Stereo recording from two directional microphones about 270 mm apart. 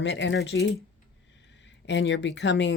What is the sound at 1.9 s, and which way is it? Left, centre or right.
Speech, left.